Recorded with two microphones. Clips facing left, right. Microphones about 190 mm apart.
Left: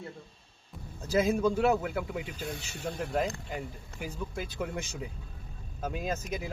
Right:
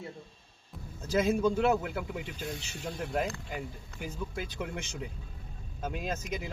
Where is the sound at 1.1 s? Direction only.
10° left (ahead or behind).